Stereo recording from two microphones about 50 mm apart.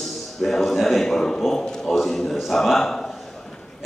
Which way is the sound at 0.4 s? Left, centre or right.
Centre.